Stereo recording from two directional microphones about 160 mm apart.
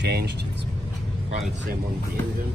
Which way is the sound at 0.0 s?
90° right.